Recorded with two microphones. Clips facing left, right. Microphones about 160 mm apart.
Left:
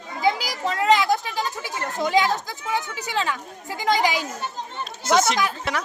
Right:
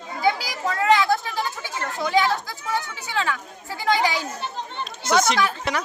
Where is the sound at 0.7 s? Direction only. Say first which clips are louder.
Even; 15° left (ahead or behind).